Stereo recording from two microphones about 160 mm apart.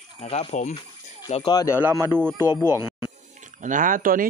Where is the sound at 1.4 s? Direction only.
25° left (ahead or behind).